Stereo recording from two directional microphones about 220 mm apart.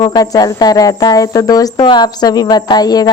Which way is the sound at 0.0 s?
15° left (ahead or behind).